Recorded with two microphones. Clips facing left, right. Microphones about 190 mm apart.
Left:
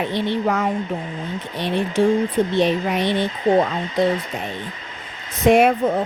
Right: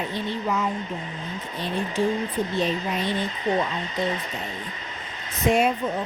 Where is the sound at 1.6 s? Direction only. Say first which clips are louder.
Left 6 dB; 75° left (ahead or behind).